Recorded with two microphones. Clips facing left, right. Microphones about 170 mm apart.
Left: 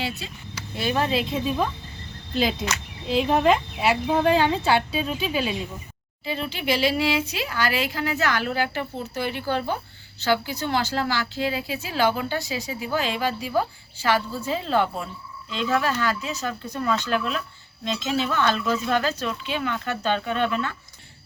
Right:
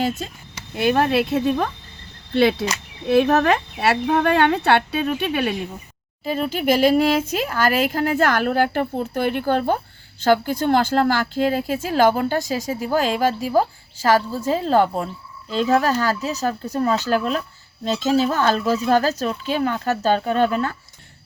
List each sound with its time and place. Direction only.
0.2 s speech: 45° right (ahead or behind)
0.8 s speech: 55° right (ahead or behind)
2.3 s a sound: 70° right (ahead or behind)
3.1 s speech: 75° right (ahead or behind)
6.2 s speech: 45° right (ahead or behind)